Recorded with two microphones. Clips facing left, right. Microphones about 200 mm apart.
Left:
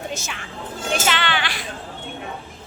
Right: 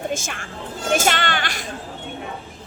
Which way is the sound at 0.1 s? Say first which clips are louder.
Right 4 dB; 50° right (ahead or behind).